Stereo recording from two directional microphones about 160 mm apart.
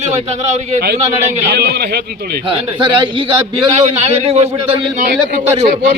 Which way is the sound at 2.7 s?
30° right (ahead or behind).